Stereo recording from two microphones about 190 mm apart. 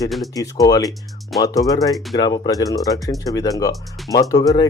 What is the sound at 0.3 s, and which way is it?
A man's voice, 20° left (ahead or behind).